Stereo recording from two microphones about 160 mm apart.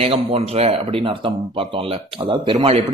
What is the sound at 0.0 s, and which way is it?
A man's voice, 40° right (ahead or behind).